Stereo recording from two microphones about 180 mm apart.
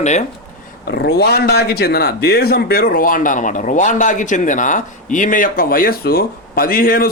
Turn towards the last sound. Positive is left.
turn(degrees=55)  # may be behind; listen again after turning